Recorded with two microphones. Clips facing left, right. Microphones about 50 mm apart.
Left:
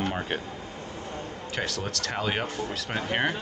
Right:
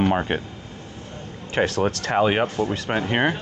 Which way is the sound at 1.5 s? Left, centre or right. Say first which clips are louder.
Right 11 dB; right.